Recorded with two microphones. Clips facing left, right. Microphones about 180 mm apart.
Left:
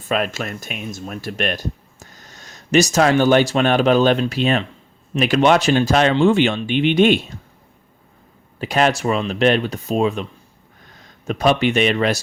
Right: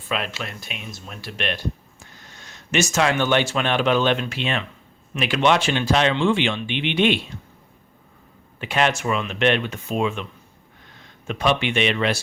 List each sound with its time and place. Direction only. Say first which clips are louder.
0.0 s speech: left 6 dB; 45° left (ahead or behind)
8.5 s speech: left 4 dB; 40° left (ahead or behind)
11.3 s speech: left 5 dB; 40° left (ahead or behind)